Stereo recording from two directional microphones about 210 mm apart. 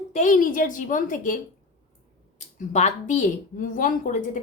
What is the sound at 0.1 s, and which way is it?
Speech, 35° left (ahead or behind).